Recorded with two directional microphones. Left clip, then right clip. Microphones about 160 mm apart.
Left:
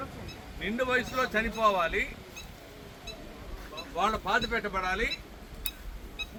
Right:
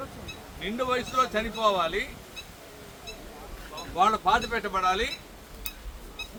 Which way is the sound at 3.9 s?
10° right (ahead or behind).